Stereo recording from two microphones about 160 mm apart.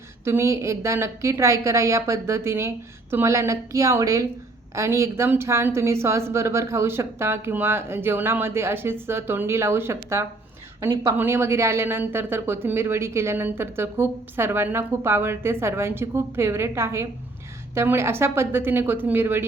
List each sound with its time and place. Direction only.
0.3 s a woman's voice: 15° right (ahead or behind)